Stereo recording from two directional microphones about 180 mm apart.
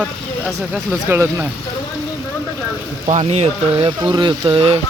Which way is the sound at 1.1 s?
10° right (ahead or behind).